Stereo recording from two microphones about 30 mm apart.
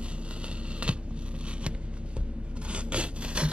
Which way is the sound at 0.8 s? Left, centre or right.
Right.